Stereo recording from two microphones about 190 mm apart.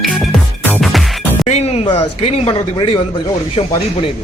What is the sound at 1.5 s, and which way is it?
A man's voice, 35° left (ahead or behind).